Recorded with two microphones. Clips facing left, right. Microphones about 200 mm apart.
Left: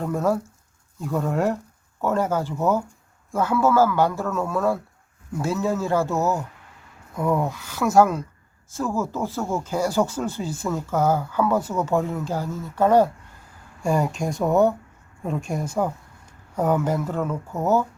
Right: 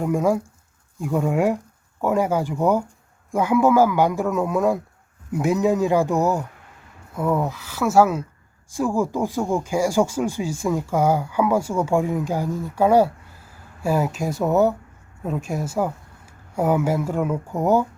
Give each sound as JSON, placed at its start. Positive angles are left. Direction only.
{"t": 0.0, "sound": "speech", "side_deg": -10}
{"t": 7.2, "sound": "speech", "side_deg": -5}